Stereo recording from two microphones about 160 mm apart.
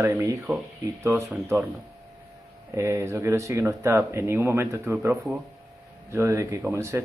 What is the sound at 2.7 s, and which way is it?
Speech, 15° right (ahead or behind).